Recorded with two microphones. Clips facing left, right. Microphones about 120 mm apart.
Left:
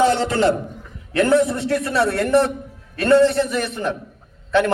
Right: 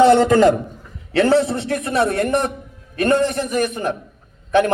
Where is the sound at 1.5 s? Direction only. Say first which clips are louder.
Even; 60° right (ahead or behind).